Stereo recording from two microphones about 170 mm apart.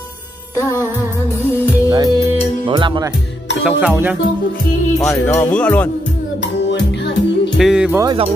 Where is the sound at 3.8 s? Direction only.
10° right (ahead or behind).